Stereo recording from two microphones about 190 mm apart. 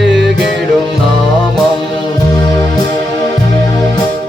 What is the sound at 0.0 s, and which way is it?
Music, 65° right (ahead or behind).